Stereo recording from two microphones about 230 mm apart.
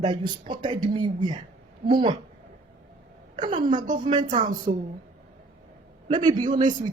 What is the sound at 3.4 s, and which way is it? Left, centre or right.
Speech, right.